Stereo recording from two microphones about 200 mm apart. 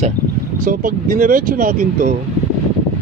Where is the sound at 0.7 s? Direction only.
45° right (ahead or behind).